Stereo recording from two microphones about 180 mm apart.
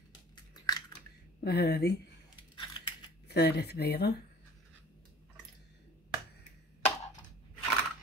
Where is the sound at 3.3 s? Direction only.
65° left (ahead or behind).